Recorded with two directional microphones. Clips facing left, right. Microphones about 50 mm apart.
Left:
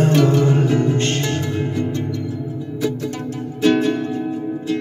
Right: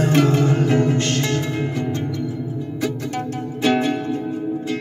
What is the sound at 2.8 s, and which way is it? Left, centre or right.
Music, right.